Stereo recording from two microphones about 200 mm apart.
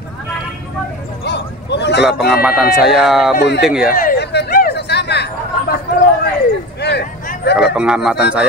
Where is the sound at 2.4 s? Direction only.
Centre (ahead or behind).